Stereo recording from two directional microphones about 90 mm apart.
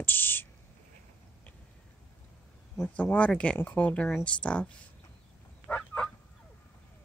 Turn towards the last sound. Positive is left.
turn(degrees=10)  # may be behind; listen again after turning